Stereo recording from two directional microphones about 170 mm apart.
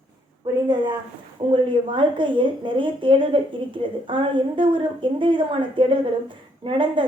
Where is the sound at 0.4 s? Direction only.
25° right (ahead or behind).